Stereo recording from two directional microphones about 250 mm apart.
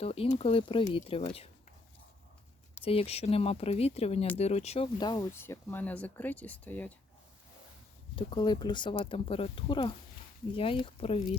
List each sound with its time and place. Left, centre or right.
0.0 s speech: left
2.8 s speech: left; by 6.9 s centre
8.1 s speech: centre